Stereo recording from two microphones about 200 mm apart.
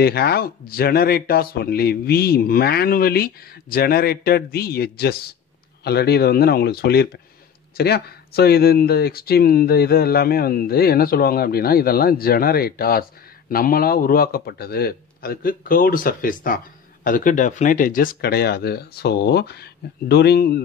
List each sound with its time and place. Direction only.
0.0 s a man's voice: 50° left (ahead or behind)